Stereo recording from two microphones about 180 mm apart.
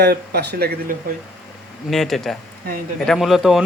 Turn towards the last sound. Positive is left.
turn(degrees=0)  # may be behind; listen again after turning